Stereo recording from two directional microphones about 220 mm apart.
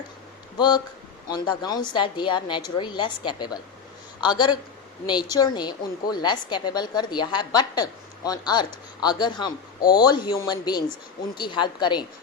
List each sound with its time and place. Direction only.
0.5 s a woman's voice: 20° left (ahead or behind)